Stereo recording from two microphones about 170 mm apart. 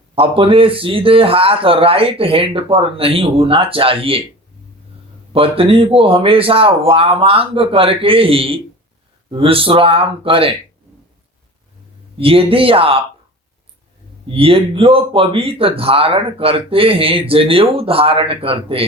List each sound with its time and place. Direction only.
0.2 s speech: 30° right (ahead or behind)
5.3 s speech: 35° right (ahead or behind)
12.1 s speech: 35° right (ahead or behind)
14.3 s speech: 35° right (ahead or behind)